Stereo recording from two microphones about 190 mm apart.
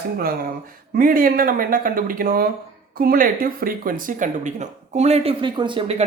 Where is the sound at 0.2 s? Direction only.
50° right (ahead or behind).